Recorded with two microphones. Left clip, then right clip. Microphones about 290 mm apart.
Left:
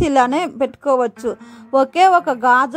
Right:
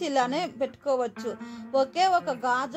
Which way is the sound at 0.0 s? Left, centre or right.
Left.